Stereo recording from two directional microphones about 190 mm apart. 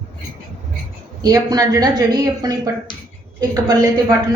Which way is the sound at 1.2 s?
20° right (ahead or behind).